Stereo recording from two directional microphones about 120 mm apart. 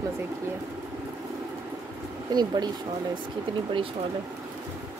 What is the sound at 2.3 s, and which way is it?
Speech, 35° right (ahead or behind).